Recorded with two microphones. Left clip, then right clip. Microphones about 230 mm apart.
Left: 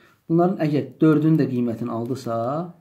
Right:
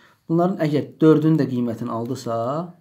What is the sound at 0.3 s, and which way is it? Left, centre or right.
Speech, right.